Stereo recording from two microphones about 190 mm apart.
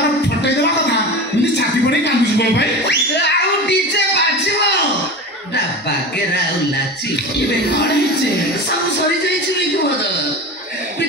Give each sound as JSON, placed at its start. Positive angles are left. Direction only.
{"t": 1.4, "sound": "music", "side_deg": 65}